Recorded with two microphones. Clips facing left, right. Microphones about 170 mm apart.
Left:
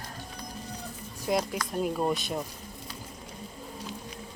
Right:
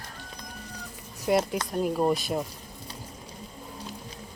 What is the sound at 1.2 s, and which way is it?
Speech, 5° right (ahead or behind).